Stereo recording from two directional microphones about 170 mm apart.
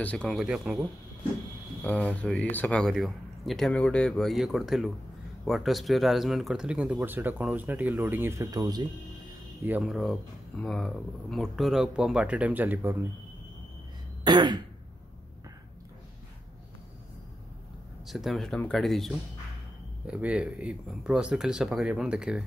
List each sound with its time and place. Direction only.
0.0 s speech: 5° left (ahead or behind)
1.8 s speech: 10° left (ahead or behind); by 8.8 s 20° right (ahead or behind)
9.6 s speech: 5° right (ahead or behind)
14.2 s throat clearing: 25° right (ahead or behind)
18.0 s speech: centre (ahead or behind)